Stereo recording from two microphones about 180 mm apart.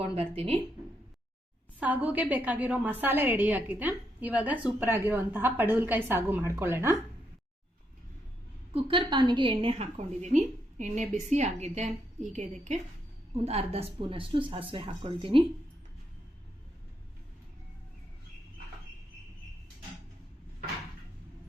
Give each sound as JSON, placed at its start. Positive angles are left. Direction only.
{"t": 0.0, "sound": "a woman's voice", "side_deg": -30}
{"t": 1.8, "sound": "a woman's voice", "side_deg": -10}
{"t": 8.7, "sound": "a woman's voice", "side_deg": -30}